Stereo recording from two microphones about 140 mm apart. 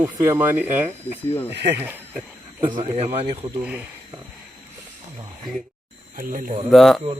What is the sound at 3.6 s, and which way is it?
Speech, 10° right (ahead or behind).